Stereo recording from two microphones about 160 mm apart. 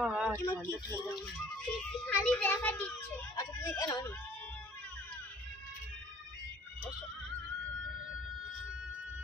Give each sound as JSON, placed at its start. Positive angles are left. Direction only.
{"t": 0.0, "sound": "a sound", "side_deg": -10}
{"t": 0.4, "sound": "a child's voice", "side_deg": 15}
{"t": 1.6, "sound": "a child's voice", "side_deg": 5}
{"t": 3.3, "sound": "speech", "side_deg": 20}